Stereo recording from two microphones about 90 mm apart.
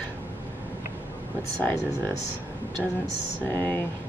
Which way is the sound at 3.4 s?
20° left (ahead or behind).